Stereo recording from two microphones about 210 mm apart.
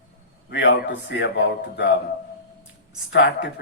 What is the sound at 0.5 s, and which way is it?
A man's voice, 55° left (ahead or behind).